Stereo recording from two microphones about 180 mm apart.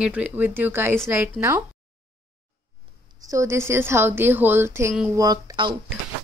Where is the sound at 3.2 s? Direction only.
15° right (ahead or behind).